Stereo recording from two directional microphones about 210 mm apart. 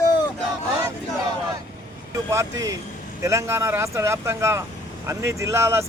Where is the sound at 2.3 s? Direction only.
15° right (ahead or behind).